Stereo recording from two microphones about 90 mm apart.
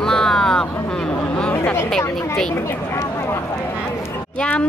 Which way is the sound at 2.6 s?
30° left (ahead or behind).